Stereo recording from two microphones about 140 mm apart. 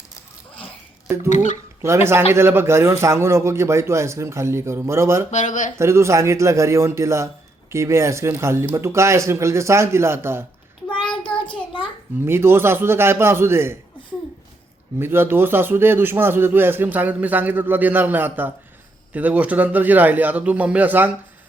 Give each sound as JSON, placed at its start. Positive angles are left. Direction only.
{"t": 1.8, "sound": "a man's voice", "side_deg": -20}
{"t": 5.3, "sound": "speech", "side_deg": 60}
{"t": 5.7, "sound": "a man's voice", "side_deg": -20}
{"t": 11.4, "sound": "a sound", "side_deg": 35}
{"t": 12.2, "sound": "a man's voice", "side_deg": -15}
{"t": 14.9, "sound": "a man's voice", "side_deg": -15}